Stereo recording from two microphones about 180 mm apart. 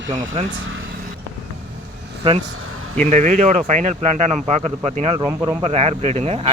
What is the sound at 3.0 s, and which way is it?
Speech, 40° right (ahead or behind).